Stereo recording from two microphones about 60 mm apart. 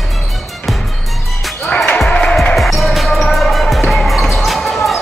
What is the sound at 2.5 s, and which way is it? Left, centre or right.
Basketball bounce, centre.